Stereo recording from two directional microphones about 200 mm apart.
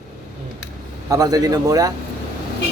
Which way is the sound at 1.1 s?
20° right (ahead or behind).